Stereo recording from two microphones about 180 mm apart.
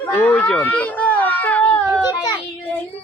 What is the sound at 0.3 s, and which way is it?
Baby cry, 5° left (ahead or behind).